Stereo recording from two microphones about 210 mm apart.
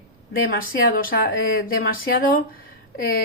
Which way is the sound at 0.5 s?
45° left (ahead or behind).